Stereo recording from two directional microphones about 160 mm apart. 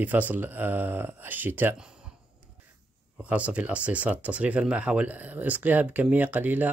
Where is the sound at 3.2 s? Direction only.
10° right (ahead or behind).